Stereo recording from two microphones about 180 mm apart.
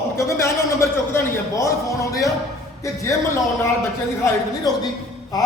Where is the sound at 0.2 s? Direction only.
15° left (ahead or behind).